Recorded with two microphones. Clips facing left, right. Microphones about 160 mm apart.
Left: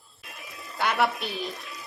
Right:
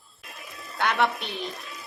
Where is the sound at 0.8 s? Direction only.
Centre (ahead or behind).